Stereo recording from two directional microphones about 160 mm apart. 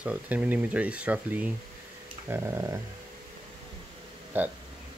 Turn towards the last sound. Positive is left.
turn(degrees=-10)  # may be behind; listen again after turning